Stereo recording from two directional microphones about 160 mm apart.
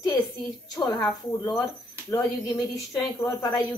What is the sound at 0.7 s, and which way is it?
Speech, 25° left (ahead or behind).